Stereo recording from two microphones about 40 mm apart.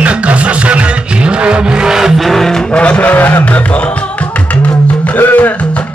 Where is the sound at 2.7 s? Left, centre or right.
Left.